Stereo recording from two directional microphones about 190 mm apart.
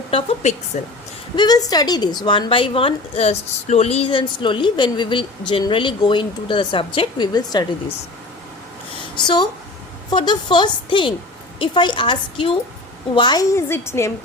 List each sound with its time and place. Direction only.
0.1 s speech: 30° left (ahead or behind)
0.7 s a woman's voice: 40° left (ahead or behind)
1.4 s speech: 20° left (ahead or behind)
9.1 s a woman's voice: 25° left (ahead or behind)